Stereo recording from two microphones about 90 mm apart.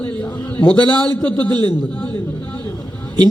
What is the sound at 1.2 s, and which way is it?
Speech, 15° left (ahead or behind).